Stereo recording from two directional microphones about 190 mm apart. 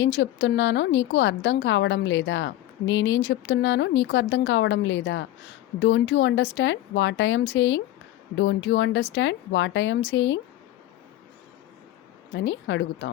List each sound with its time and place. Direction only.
0.0 s a woman's voice: 75° left (ahead or behind)
8.4 s speech: 75° left (ahead or behind)
12.3 s speech: 80° left